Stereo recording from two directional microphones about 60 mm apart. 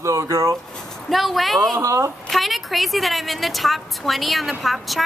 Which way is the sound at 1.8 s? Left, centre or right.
Right.